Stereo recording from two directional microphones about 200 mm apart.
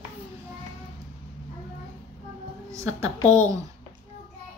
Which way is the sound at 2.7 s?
15° right (ahead or behind).